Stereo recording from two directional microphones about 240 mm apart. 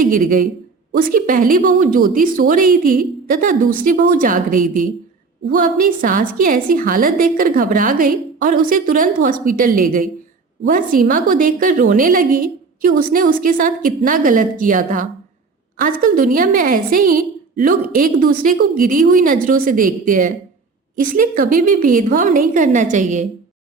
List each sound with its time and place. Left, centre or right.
0.0 s a man's voice: right